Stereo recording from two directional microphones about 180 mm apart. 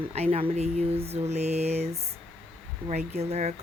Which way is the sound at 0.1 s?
35° right (ahead or behind).